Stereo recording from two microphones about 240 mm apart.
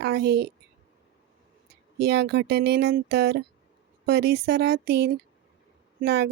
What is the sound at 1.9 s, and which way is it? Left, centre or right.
A woman's voice, right.